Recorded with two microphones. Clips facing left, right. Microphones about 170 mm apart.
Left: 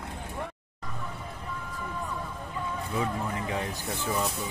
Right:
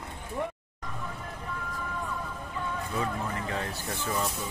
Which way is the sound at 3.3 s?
15° left (ahead or behind).